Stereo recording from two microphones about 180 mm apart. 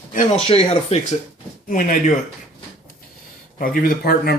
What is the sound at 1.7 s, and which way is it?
Speech, 50° left (ahead or behind).